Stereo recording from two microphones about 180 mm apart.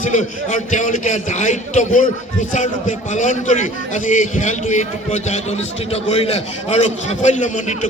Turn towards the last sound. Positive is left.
turn(degrees=45)  # may be behind; listen again after turning